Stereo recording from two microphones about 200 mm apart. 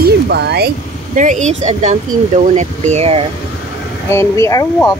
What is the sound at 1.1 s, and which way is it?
Speech, 40° right (ahead or behind).